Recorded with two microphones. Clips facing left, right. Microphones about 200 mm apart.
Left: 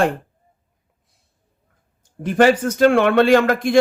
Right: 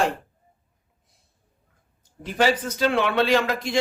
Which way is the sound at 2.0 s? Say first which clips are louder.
Left 8 dB; 50° left (ahead or behind).